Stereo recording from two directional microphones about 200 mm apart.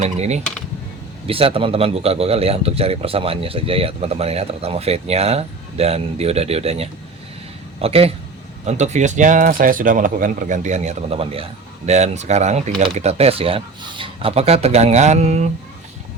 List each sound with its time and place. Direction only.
0.0 s speech: 35° right (ahead or behind)